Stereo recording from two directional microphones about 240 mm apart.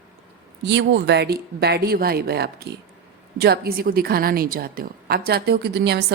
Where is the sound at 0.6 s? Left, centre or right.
Right.